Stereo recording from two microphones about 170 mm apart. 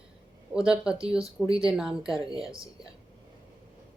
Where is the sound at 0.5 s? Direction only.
5° right (ahead or behind).